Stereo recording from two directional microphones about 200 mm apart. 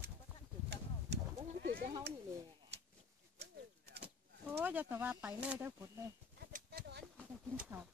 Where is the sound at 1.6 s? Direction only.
45° right (ahead or behind).